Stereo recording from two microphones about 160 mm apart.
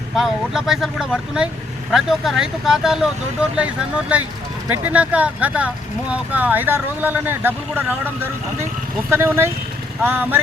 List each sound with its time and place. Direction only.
0.2 s speech: centre (ahead or behind)